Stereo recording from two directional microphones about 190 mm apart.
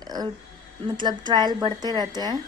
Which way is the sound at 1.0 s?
25° right (ahead or behind).